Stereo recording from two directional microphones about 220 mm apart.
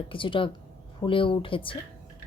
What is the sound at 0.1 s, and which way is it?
Speech, 25° left (ahead or behind).